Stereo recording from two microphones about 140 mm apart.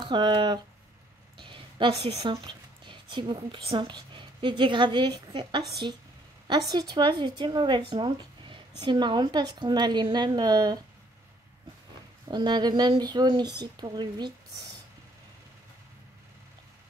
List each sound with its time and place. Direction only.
0.0 s speech: 35° right (ahead or behind)
6.7 s speech: 30° right (ahead or behind)
12.3 s speech: 30° right (ahead or behind)